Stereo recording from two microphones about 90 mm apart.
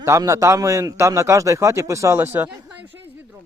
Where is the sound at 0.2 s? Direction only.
40° right (ahead or behind).